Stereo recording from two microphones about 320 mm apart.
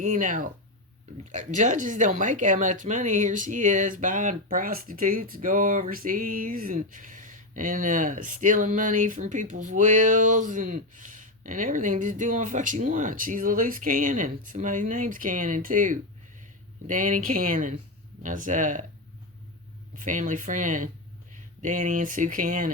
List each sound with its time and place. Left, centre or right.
0.0 s speech: right
20.0 s speech: right